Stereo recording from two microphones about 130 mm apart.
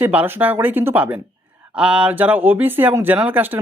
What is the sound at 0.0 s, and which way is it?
Speech, 15° right (ahead or behind).